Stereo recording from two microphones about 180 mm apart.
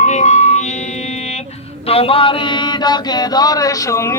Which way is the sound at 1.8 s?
30° left (ahead or behind).